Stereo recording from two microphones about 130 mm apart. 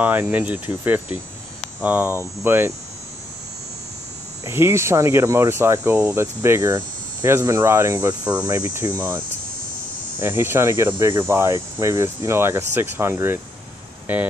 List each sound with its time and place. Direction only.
0.0 s speech: 15° right (ahead or behind)
4.5 s speech: 20° right (ahead or behind)
8.5 s speech: 30° right (ahead or behind)
10.1 s speech: 15° right (ahead or behind)